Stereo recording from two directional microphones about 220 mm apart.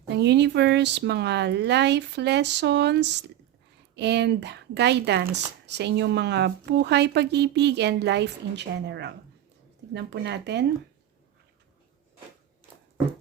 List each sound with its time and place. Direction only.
0.1 s speech: 50° right (ahead or behind)